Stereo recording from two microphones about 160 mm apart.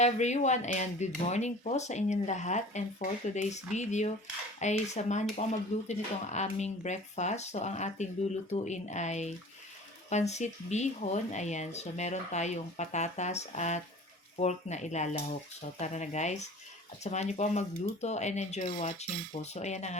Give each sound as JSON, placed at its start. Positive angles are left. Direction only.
{"t": 0.0, "sound": "speech", "side_deg": 45}